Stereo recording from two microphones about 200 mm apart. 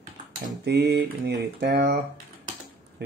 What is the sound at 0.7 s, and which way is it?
A man's voice, 55° right (ahead or behind).